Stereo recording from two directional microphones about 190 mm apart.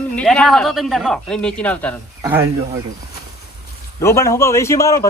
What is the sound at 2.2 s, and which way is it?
Speech, 15° right (ahead or behind).